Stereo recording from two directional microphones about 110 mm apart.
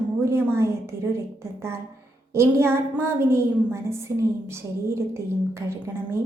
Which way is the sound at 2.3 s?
25° right (ahead or behind).